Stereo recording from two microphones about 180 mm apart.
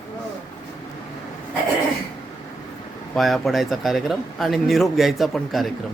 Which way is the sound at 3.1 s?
Centre (ahead or behind).